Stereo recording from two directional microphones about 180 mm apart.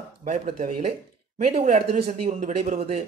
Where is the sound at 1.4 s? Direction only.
35° right (ahead or behind).